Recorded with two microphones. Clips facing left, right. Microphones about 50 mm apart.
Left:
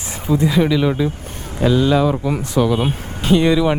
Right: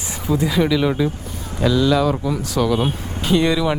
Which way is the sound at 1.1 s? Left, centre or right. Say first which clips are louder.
Even; left.